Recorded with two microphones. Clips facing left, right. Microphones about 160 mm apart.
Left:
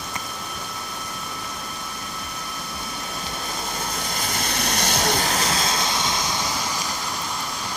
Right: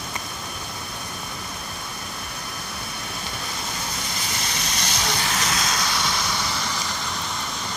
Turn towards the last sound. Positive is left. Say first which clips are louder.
# left 1 dB
turn(degrees=15)  # may be behind; listen again after turning